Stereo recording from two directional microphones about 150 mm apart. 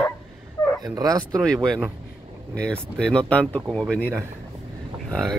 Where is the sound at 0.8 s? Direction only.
25° right (ahead or behind).